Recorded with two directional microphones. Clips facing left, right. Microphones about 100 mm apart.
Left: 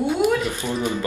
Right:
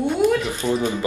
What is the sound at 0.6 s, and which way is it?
Speech, 15° right (ahead or behind).